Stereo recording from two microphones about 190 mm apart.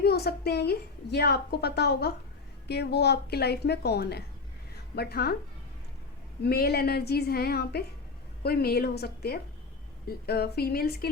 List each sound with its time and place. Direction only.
0.0 s a woman's voice: 55° left (ahead or behind)
6.4 s a woman's voice: 55° left (ahead or behind)